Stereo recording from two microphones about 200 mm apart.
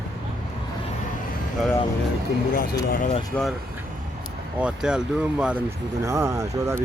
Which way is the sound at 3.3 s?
10° left (ahead or behind).